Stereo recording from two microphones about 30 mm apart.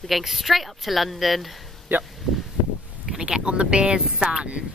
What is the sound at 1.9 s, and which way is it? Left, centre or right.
Speech, right.